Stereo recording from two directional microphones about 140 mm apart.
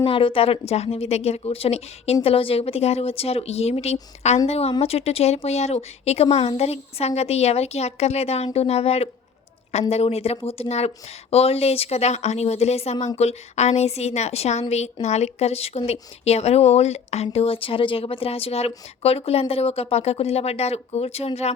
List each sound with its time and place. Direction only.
0.0 s speech: 40° left (ahead or behind)